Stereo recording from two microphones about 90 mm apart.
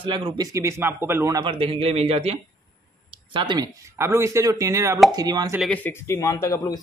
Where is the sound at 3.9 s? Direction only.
30° right (ahead or behind).